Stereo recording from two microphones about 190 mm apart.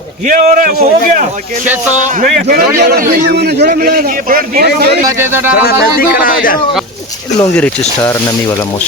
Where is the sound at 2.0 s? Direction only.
45° right (ahead or behind).